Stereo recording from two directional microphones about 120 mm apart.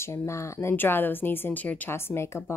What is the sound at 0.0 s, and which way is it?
Speech, 20° left (ahead or behind).